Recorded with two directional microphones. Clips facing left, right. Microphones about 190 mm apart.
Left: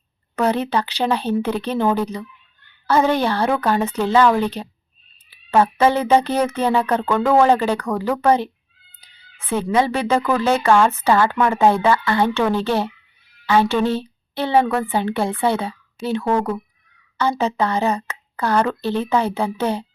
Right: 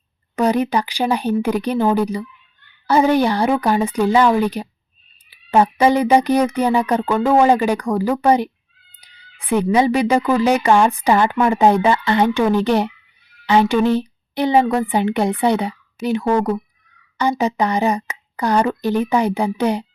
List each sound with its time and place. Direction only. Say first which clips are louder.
0.3 s speech: right 2 dB; 10° right (ahead or behind)
9.0 s cat: right 1 dB; 15° right (ahead or behind)
9.6 s speech: right 2 dB; 10° right (ahead or behind)